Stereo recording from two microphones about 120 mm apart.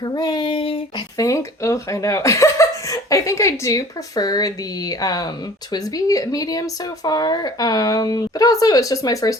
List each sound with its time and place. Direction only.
0.0 s speech: 35° left (ahead or behind)
1.1 s speech: 30° left (ahead or behind)